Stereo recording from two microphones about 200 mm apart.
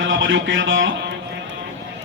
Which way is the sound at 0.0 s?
70° right (ahead or behind).